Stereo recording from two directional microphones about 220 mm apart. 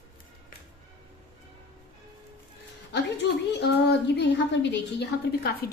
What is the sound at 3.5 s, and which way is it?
A woman's voice, 50° left (ahead or behind).